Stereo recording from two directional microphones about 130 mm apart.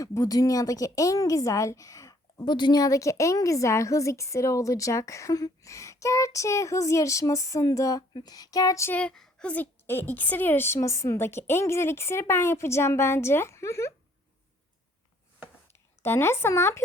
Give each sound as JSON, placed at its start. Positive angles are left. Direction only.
{"t": 0.0, "sound": "a woman's voice", "side_deg": 25}
{"t": 9.0, "sound": "a woman's voice", "side_deg": 5}
{"t": 16.0, "sound": "a woman's voice", "side_deg": 20}